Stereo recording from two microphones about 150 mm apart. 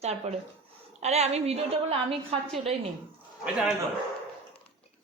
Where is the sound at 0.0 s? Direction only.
45° right (ahead or behind).